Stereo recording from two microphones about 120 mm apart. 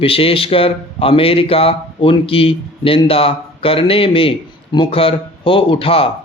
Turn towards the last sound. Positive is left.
turn(degrees=50)  # may be behind; listen again after turning